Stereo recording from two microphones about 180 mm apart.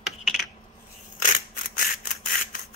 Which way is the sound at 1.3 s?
50° left (ahead or behind).